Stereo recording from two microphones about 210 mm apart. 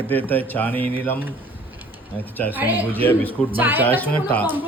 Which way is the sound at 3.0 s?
10° left (ahead or behind).